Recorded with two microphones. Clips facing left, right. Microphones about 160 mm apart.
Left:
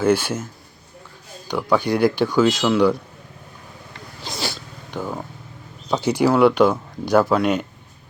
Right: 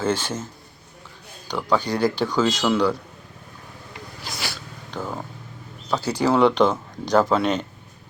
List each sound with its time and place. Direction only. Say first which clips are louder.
0.0 s speech: left 5 dB; 10° left (ahead or behind)
1.5 s speech: left 3 dB; 10° left (ahead or behind)
4.2 s cat: left 5 dB; 25° left (ahead or behind)
4.9 s speech: left 2 dB; 10° left (ahead or behind)